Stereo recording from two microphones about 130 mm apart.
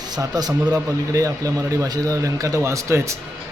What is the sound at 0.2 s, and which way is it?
Speech, 30° right (ahead or behind).